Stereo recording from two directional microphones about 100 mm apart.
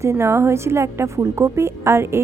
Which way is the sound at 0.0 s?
25° right (ahead or behind).